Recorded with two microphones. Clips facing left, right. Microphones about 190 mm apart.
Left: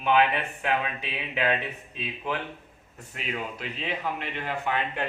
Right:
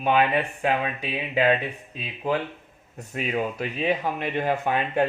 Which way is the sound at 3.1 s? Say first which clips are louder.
Right 7 dB; 50° right (ahead or behind).